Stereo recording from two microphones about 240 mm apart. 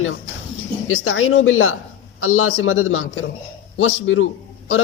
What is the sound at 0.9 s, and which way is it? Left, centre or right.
A woman's voice, left.